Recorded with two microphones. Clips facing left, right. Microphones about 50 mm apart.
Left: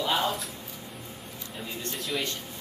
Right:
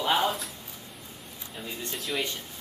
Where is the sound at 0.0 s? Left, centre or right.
Centre.